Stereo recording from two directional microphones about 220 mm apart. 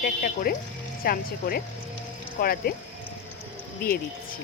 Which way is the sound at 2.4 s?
45° left (ahead or behind).